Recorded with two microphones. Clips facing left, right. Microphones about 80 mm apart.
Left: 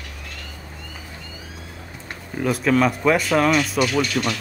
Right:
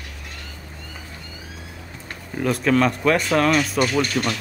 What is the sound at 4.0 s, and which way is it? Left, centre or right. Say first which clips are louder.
Speech: even; right.